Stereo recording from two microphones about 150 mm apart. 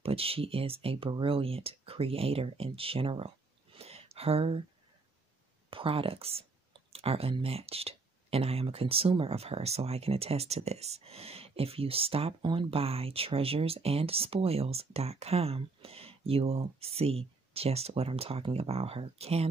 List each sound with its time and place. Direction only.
0.0 s speech: 40° right (ahead or behind)
5.7 s speech: 35° right (ahead or behind)